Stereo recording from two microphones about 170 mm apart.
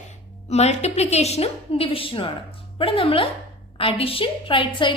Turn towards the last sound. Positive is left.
turn(degrees=30)  # may be behind; listen again after turning